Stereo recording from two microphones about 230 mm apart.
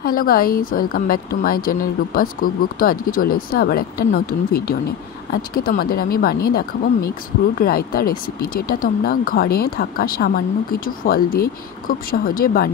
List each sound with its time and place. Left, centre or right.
0.0 s speech: left